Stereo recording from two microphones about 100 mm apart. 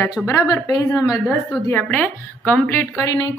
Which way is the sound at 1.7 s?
20° left (ahead or behind).